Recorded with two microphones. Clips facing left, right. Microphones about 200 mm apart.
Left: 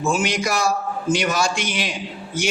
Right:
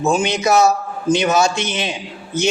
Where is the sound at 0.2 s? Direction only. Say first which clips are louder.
Right 7 dB; 25° right (ahead or behind).